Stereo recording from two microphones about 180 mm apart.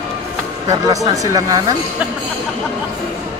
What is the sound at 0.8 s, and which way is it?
Speech, 20° right (ahead or behind).